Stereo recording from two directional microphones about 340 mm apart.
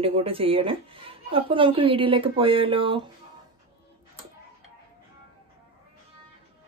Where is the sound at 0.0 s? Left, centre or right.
Centre.